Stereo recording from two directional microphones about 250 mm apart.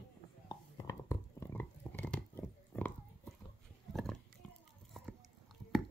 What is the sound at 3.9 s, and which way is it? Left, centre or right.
Oink, centre.